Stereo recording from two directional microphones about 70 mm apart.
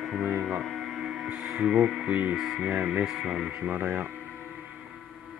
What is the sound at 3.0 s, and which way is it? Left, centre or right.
Speech, centre.